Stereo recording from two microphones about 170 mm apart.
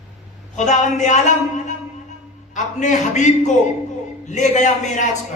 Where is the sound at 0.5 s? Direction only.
45° left (ahead or behind).